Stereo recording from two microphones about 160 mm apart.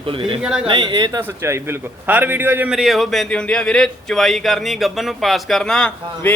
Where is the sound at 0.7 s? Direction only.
30° right (ahead or behind).